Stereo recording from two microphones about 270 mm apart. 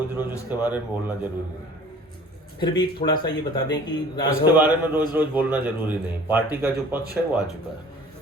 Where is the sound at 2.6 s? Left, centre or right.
Centre.